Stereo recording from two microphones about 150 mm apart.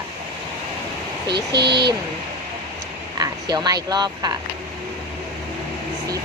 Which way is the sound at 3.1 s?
25° right (ahead or behind).